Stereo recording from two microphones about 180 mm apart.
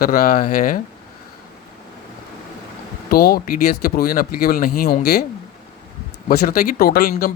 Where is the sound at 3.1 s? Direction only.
60° left (ahead or behind).